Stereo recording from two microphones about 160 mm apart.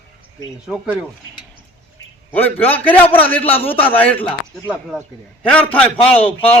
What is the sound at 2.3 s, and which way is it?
Speech, 10° left (ahead or behind).